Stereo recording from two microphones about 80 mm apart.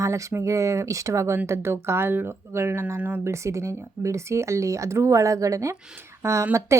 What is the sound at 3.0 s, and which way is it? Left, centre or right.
Speech, centre.